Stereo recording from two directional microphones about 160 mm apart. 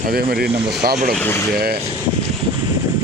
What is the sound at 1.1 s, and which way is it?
Speech, 10° left (ahead or behind).